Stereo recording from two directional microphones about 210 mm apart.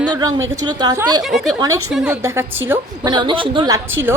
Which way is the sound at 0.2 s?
15° right (ahead or behind).